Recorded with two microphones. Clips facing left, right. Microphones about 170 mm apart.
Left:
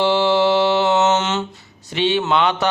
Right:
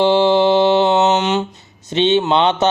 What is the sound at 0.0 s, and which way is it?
Mantra, 20° right (ahead or behind).